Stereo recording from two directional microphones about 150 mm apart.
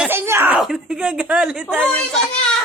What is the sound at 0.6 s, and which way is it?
A woman's voice, 5° right (ahead or behind).